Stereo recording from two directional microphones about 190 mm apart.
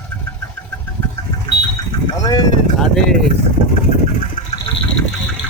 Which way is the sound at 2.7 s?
Centre (ahead or behind).